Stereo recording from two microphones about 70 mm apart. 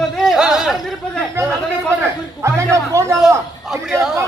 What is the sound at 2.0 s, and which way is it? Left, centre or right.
A man's voice, right.